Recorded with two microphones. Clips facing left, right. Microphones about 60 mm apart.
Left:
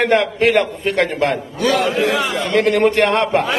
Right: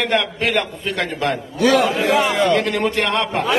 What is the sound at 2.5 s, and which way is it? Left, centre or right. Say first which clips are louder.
Speech: left 4 dB; left.